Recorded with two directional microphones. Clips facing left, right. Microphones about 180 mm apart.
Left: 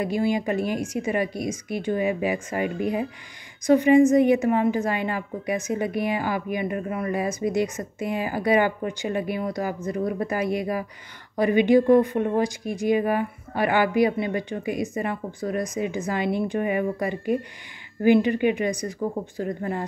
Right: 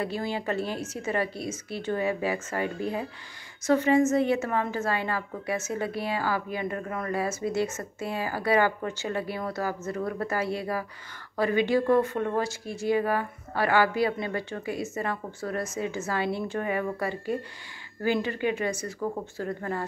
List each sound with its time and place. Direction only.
0.0 s a woman's voice: 15° left (ahead or behind)